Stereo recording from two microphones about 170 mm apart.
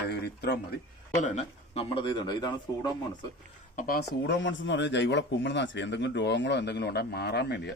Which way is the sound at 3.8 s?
60° left (ahead or behind).